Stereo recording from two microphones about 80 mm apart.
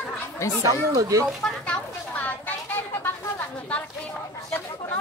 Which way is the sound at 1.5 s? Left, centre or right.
Centre.